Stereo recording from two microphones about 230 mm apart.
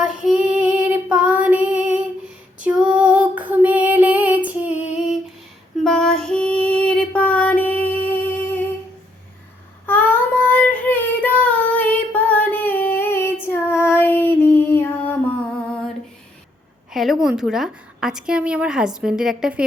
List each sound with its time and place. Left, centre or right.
0.0 s child singing: centre
2.6 s female singing: centre
5.8 s female singing: centre
9.8 s child singing: centre
13.4 s female singing: centre
16.9 s a woman's voice: centre